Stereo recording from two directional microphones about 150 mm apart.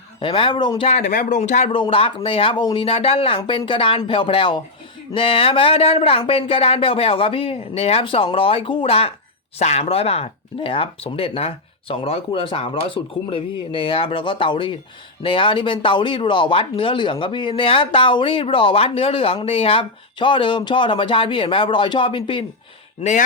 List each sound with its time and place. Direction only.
0.2 s speech: 35° left (ahead or behind)
0.9 s speech: 55° left (ahead or behind)
1.7 s speech: 35° left (ahead or behind)